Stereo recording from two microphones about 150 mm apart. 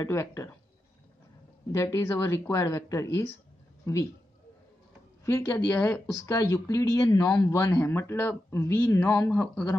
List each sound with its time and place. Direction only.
0.0 s speech: 20° left (ahead or behind)
1.7 s speech: 20° left (ahead or behind)
5.2 s speech: 15° left (ahead or behind)
7.6 s speech: 15° left (ahead or behind)